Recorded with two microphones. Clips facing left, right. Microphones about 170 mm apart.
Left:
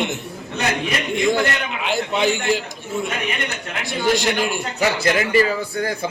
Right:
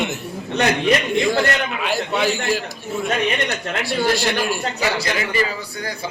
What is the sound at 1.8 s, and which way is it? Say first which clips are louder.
Speech: left 2 dB; 20° left (ahead or behind).